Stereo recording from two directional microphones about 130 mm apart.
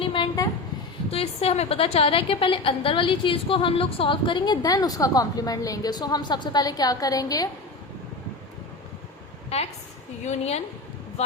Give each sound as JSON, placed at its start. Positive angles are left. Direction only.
{"t": 0.0, "sound": "a sound", "side_deg": 40}
{"t": 1.1, "sound": "a woman's voice", "side_deg": 50}
{"t": 9.5, "sound": "a woman's voice", "side_deg": 55}